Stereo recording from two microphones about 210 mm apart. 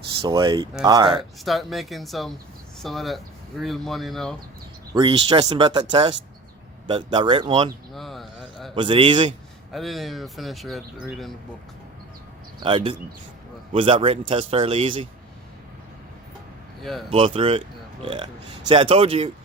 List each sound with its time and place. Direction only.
0.2 s speech: 20° right (ahead or behind)
1.5 s speech: centre (ahead or behind)
4.9 s speech: 25° right (ahead or behind)
7.9 s a man's voice: centre (ahead or behind)
8.7 s speech: 25° right (ahead or behind)
9.7 s speech: centre (ahead or behind)
12.6 s speech: 25° right (ahead or behind)
16.8 s speech: centre (ahead or behind)
17.1 s speech: 25° right (ahead or behind)